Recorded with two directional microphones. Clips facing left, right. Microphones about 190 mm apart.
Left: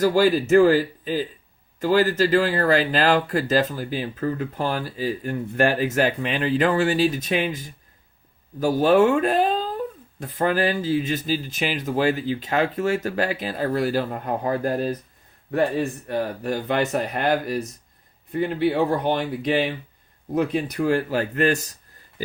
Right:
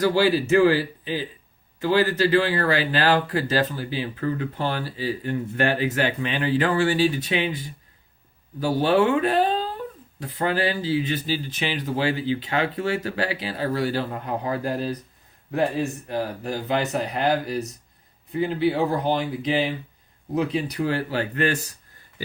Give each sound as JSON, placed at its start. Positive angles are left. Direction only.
{"t": 0.0, "sound": "speech", "side_deg": 45}